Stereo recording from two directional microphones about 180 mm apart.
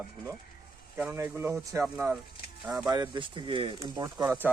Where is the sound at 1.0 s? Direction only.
10° right (ahead or behind).